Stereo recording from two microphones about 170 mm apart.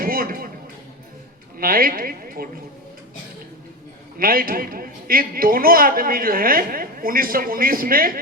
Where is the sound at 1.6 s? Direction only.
60° right (ahead or behind).